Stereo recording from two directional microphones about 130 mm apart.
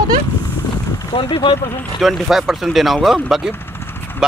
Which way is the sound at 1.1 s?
45° left (ahead or behind).